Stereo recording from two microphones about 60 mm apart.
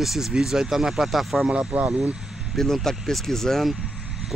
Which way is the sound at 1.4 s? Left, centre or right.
Right.